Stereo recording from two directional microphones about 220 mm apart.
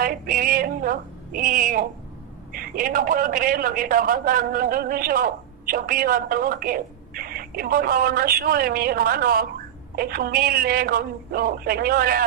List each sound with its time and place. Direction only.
0.0 s a woman's voice: 40° right (ahead or behind)